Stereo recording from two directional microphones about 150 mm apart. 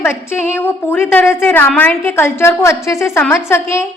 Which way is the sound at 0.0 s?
15° left (ahead or behind).